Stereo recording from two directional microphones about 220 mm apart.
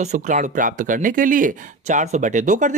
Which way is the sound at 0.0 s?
35° right (ahead or behind).